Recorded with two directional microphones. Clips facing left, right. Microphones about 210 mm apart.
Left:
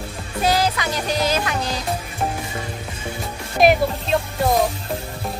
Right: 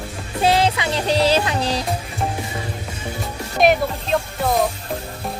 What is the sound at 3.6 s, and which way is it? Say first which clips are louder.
Music: left 1 dB; centre (ahead or behind).